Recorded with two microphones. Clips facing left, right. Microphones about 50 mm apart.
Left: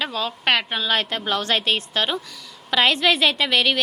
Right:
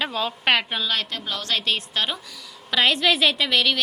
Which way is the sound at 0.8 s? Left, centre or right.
Centre.